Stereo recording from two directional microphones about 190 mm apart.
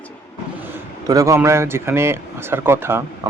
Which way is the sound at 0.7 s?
20° right (ahead or behind).